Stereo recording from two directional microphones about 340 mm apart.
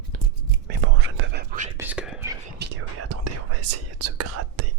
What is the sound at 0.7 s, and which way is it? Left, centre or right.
Whispering, right.